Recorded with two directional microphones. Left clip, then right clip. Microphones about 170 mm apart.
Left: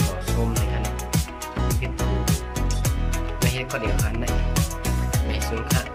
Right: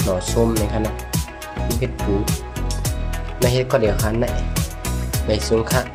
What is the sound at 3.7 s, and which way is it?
Speech, 30° right (ahead or behind).